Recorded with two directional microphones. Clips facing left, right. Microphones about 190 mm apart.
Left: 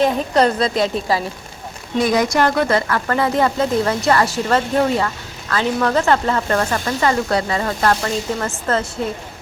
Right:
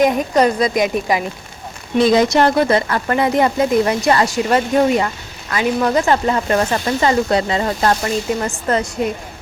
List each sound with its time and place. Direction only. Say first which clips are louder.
0.0 s speech: right 2 dB; 15° right (ahead or behind)